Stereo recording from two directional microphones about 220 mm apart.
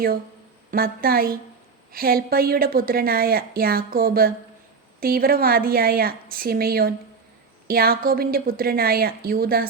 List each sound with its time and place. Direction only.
0.7 s a woman's voice: 40° right (ahead or behind)